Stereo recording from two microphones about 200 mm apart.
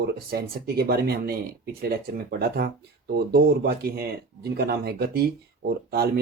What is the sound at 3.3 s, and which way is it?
Speech, 50° right (ahead or behind).